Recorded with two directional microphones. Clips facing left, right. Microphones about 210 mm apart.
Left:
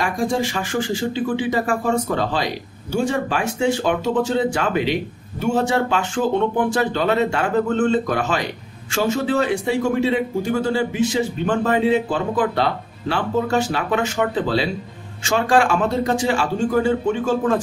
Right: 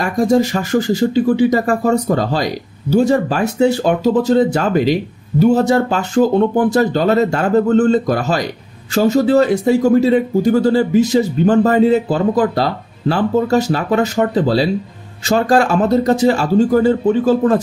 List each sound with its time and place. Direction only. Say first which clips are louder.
0.0 s speech: right 7 dB; 40° right (ahead or behind)